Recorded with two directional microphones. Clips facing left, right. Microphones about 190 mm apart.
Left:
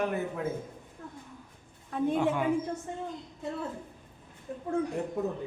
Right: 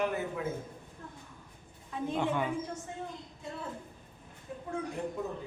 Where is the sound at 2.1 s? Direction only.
5° left (ahead or behind).